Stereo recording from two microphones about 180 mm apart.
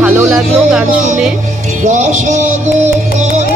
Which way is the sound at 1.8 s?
40° right (ahead or behind).